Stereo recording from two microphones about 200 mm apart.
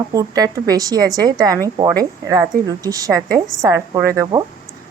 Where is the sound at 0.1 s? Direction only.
20° right (ahead or behind).